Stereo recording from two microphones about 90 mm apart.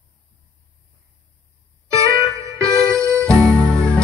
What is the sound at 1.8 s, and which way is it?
Music, 35° right (ahead or behind).